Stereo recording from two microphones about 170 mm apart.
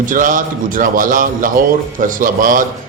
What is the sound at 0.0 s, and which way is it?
A man's voice, 50° right (ahead or behind).